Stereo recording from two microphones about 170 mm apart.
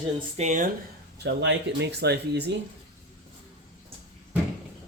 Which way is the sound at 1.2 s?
90° right.